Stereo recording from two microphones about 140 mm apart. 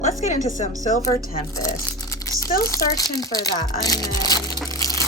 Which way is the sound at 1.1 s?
90° left.